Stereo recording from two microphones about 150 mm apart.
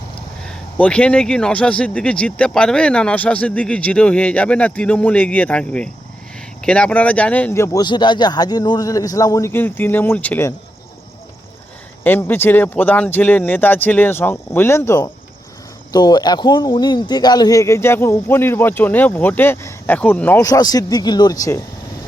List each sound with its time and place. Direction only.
0.4 s a man's voice: 5° left (ahead or behind)
12.0 s a man's voice: 15° left (ahead or behind)
20.4 s speech: 25° left (ahead or behind)